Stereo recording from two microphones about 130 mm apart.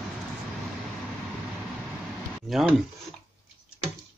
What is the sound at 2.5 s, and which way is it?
Speech, centre (ahead or behind).